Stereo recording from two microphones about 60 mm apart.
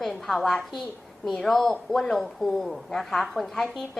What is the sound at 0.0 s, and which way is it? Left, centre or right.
A woman's voice, centre.